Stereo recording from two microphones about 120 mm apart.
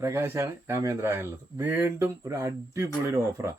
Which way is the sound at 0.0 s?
20° right (ahead or behind).